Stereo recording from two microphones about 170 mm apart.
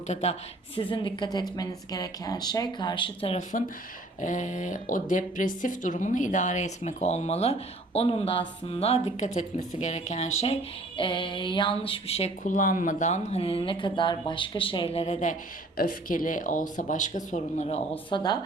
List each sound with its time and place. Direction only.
0.1 s a woman's voice: 40° left (ahead or behind)
4.2 s a woman's voice: 50° left (ahead or behind)
15.8 s speech: 55° left (ahead or behind)
18.1 s a woman's voice: 25° left (ahead or behind)